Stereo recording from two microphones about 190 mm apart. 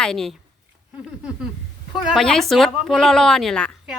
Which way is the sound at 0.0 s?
Centre (ahead or behind).